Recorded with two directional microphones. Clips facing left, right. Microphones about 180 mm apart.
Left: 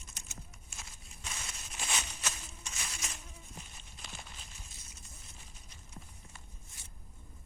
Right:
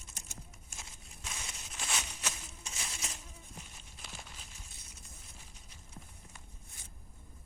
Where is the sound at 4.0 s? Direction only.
5° right (ahead or behind).